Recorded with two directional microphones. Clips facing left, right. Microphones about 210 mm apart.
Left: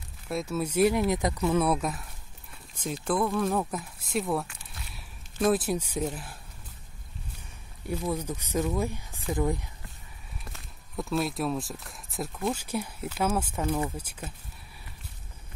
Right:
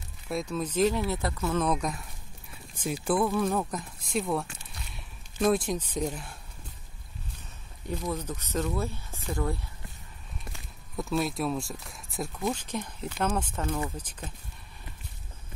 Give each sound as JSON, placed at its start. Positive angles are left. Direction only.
{"t": 0.3, "sound": "speech", "side_deg": 5}
{"t": 4.6, "sound": "a sound", "side_deg": 0}
{"t": 7.8, "sound": "speech", "side_deg": 10}
{"t": 10.5, "sound": "speech", "side_deg": 0}